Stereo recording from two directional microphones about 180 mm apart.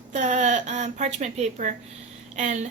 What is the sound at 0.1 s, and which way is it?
A woman's voice, 40° right (ahead or behind).